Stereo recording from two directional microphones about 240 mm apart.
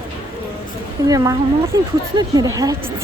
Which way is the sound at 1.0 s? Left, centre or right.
Centre.